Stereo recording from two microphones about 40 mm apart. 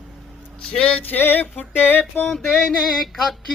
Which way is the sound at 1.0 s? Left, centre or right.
Left.